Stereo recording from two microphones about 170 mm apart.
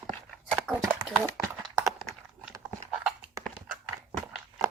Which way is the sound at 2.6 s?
5° right (ahead or behind).